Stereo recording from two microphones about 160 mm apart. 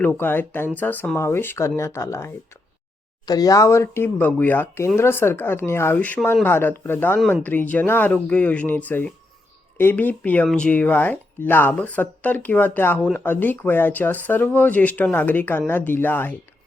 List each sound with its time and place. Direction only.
0.0 s speech: 10° left (ahead or behind)